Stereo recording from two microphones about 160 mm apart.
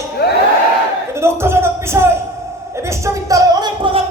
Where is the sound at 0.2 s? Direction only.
90° left.